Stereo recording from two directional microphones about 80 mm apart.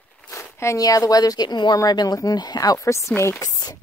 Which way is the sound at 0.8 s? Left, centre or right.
Left.